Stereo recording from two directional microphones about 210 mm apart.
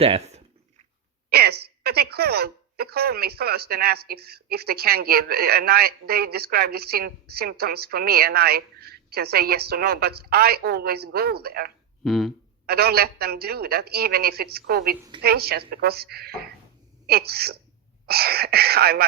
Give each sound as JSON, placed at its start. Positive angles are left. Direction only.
{"t": 0.0, "sound": "speech", "side_deg": -30}
{"t": 1.3, "sound": "a woman's voice", "side_deg": -50}
{"t": 12.0, "sound": "speech", "side_deg": 0}
{"t": 12.6, "sound": "a woman's voice", "side_deg": -50}